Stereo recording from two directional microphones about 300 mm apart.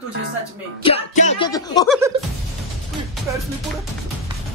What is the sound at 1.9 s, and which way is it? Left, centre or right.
Music, centre.